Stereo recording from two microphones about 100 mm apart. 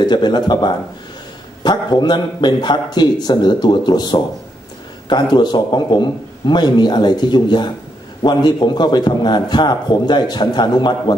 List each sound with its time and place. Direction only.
0.0 s a man's voice: 45° left (ahead or behind)